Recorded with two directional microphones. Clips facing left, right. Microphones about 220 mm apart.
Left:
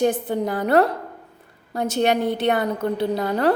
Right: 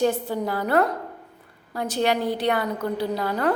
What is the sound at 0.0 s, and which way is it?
A woman's voice, 20° left (ahead or behind).